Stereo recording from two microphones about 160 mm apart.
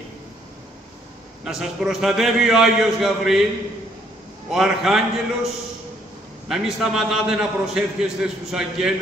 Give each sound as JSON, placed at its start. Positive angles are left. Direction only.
{"t": 1.4, "sound": "a man's voice", "side_deg": -5}
{"t": 4.5, "sound": "a man's voice", "side_deg": 0}
{"t": 6.5, "sound": "a man's voice", "side_deg": -5}